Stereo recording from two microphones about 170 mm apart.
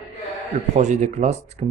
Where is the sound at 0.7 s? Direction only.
45° right (ahead or behind).